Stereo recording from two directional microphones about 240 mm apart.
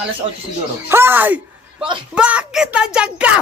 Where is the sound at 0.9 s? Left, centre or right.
Centre.